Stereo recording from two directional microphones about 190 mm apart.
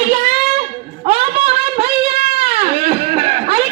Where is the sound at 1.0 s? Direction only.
35° right (ahead or behind).